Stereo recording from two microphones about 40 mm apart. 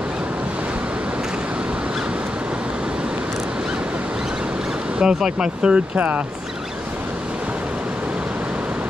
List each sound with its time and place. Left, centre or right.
4.9 s speech: centre
5.9 s speech: right